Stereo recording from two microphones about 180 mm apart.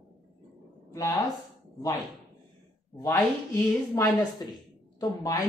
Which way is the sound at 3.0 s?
20° left (ahead or behind).